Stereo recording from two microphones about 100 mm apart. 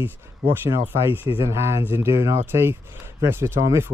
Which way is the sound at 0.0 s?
20° right (ahead or behind).